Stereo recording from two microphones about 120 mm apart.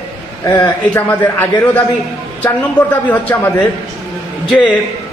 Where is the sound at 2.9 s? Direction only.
15° left (ahead or behind).